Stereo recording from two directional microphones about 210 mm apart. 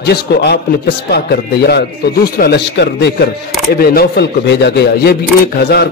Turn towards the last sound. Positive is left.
turn(degrees=50)  # may be behind; listen again after turning